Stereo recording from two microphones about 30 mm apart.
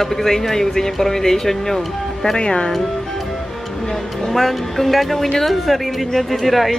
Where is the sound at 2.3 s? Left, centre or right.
Left.